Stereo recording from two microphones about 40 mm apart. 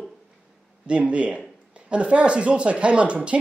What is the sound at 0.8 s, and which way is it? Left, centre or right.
A woman's voice, right.